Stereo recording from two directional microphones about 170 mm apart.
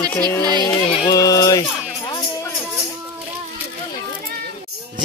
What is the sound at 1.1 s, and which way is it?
Speech, 20° left (ahead or behind).